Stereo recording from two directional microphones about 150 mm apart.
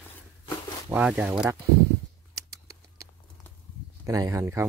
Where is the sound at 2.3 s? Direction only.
20° right (ahead or behind).